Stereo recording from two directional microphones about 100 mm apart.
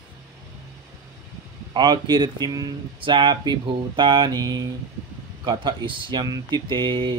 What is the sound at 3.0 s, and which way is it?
Speech, 55° right (ahead or behind).